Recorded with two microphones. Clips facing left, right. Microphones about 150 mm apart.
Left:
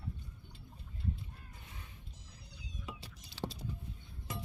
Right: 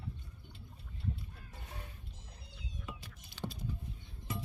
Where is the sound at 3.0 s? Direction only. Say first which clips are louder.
Left 4 dB; 35° left (ahead or behind).